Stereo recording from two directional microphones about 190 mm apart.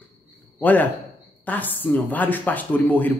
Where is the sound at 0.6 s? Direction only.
10° left (ahead or behind).